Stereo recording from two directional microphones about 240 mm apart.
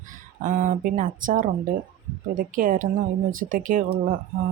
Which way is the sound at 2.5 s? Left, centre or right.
Right.